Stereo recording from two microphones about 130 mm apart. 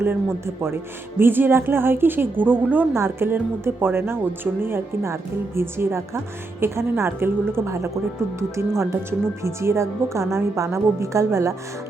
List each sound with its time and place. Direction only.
0.0 s a woman's voice: 20° right (ahead or behind)